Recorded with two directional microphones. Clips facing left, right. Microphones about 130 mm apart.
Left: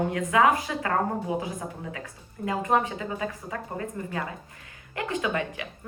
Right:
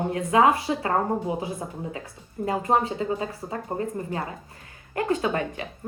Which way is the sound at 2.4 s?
30° right (ahead or behind).